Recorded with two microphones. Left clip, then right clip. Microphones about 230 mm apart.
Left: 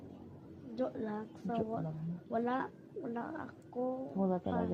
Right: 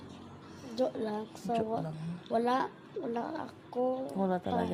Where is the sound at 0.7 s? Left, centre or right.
Right.